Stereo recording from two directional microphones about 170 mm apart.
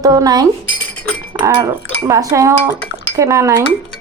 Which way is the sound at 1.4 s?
20° right (ahead or behind).